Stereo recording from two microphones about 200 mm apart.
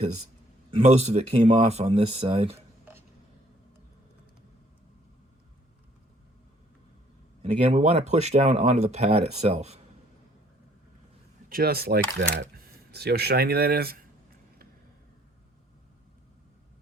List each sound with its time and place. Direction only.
0.7 s speech: 30° right (ahead or behind)
7.4 s speech: 35° right (ahead or behind)
11.4 s speech: 50° right (ahead or behind)